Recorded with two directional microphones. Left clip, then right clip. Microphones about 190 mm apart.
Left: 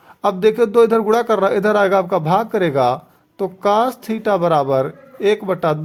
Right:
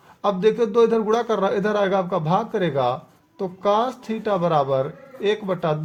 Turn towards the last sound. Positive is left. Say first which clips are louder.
# left 6 dB
turn(degrees=40)  # may be behind; listen again after turning